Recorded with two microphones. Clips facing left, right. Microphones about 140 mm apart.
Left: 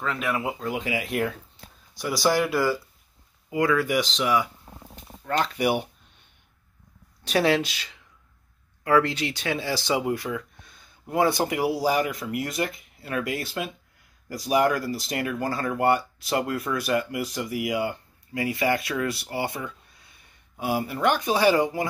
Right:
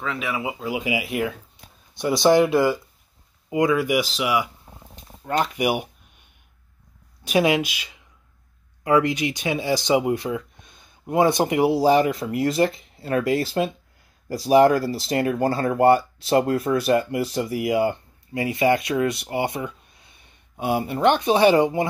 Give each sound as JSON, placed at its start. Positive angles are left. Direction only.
{"t": 0.0, "sound": "speech", "side_deg": 0}
{"t": 1.6, "sound": "a sound", "side_deg": -15}
{"t": 2.0, "sound": "speech", "side_deg": -25}
{"t": 7.2, "sound": "speech", "side_deg": -15}